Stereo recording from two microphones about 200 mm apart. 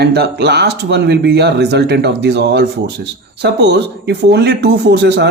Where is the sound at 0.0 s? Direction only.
55° right (ahead or behind).